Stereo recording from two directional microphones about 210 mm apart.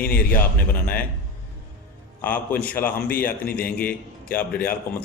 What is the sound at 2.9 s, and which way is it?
Speech, 45° left (ahead or behind).